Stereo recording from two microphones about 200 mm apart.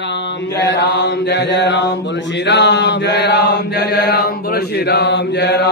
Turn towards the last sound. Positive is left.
turn(degrees=55)  # may be behind; listen again after turning